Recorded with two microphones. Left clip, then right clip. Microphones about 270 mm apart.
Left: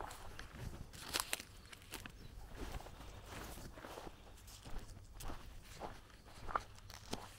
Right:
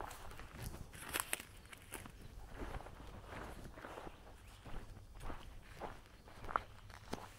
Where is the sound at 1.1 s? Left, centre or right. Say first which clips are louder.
Left 1 dB; centre.